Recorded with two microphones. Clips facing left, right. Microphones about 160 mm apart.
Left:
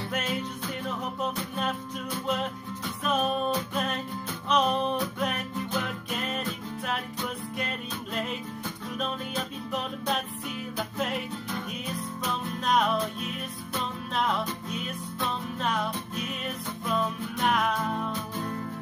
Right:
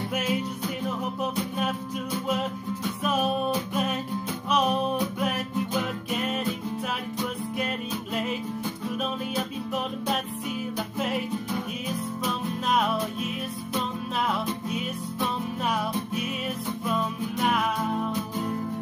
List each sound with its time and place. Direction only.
0.1 s music: 5° right (ahead or behind)
3.0 s music: 5° right (ahead or behind)
11.0 s music: centre (ahead or behind)
12.6 s music: 5° right (ahead or behind)
15.1 s music: 10° right (ahead or behind)
16.8 s music: 5° right (ahead or behind)